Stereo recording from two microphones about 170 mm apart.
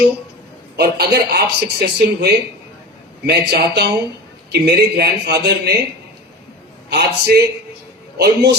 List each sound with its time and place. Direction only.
0.8 s speech: 70° right (ahead or behind)
6.9 s a man's voice: 75° right (ahead or behind)